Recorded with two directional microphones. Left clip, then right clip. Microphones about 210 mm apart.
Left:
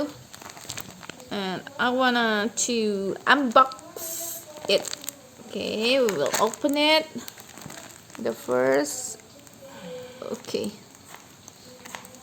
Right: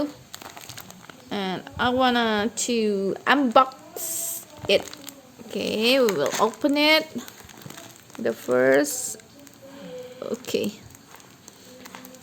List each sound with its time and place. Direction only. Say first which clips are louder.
0.7 s a sound: left 4 dB; 30° left (ahead or behind)
1.3 s speech: right 2 dB; 10° right (ahead or behind)
5.5 s speech: right 2 dB; 20° right (ahead or behind)
10.2 s speech: right 4 dB; 15° right (ahead or behind)